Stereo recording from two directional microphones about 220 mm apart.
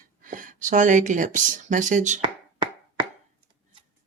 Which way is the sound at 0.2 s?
35° right (ahead or behind).